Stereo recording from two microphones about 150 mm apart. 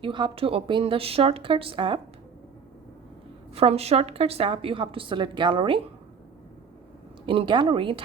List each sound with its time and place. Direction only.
0.0 s a woman's voice: 35° right (ahead or behind)
3.5 s a woman's voice: 40° right (ahead or behind)
7.3 s a woman's voice: 35° right (ahead or behind)